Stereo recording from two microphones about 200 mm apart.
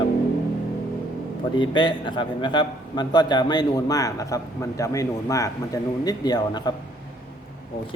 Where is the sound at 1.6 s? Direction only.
25° left (ahead or behind).